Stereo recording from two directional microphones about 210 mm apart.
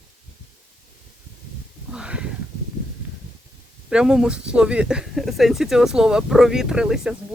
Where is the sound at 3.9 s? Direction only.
5° right (ahead or behind).